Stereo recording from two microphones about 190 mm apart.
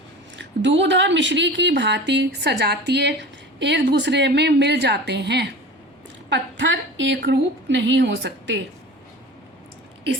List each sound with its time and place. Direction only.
0.3 s speech: 70° right (ahead or behind)
6.3 s a woman's voice: 75° right (ahead or behind)